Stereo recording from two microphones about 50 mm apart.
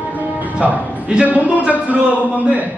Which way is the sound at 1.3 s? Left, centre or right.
Right.